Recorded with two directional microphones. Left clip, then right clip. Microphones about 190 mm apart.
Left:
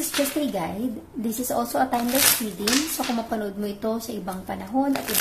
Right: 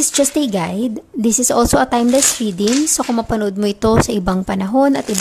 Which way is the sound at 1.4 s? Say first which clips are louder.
Right 9 dB; 50° right (ahead or behind).